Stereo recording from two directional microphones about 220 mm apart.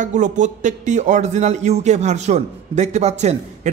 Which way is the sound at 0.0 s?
35° right (ahead or behind).